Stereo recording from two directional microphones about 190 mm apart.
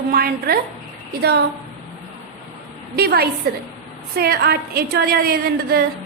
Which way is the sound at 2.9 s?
55° right (ahead or behind).